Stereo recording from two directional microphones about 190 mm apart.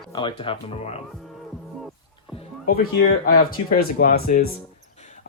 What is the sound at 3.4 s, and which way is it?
Speech, 50° left (ahead or behind).